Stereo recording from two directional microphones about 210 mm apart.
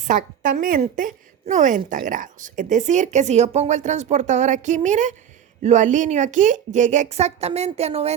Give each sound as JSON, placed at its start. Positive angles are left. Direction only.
{"t": 0.0, "sound": "a woman's voice", "side_deg": -40}